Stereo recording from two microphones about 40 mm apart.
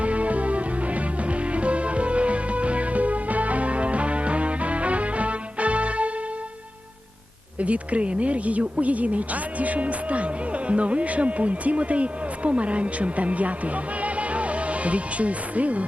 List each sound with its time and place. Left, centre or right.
0.0 s music: right
7.6 s speech: right
14.0 s music: right